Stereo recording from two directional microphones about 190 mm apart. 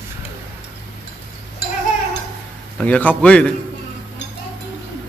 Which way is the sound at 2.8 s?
10° left (ahead or behind).